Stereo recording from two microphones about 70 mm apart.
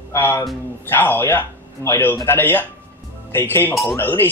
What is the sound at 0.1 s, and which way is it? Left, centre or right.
Speech, left.